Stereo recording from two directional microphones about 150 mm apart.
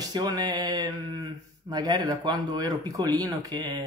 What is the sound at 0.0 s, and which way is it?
Speech, 25° right (ahead or behind).